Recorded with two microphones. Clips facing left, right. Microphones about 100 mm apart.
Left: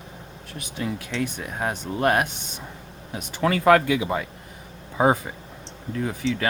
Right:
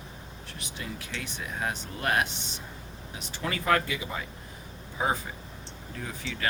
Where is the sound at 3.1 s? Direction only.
75° left (ahead or behind).